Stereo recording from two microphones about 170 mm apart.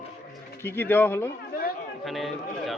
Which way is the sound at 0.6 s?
15° left (ahead or behind).